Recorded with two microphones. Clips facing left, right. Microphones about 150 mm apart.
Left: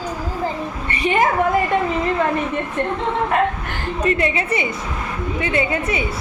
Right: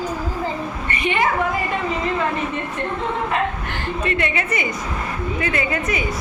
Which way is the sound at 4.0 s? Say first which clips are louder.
Left 4 dB; 35° left (ahead or behind).